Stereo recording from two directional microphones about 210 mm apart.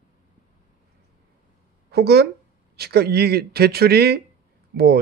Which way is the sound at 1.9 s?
50° right (ahead or behind).